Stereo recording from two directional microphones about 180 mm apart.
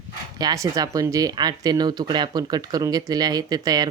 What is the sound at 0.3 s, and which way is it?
Speech, 20° right (ahead or behind).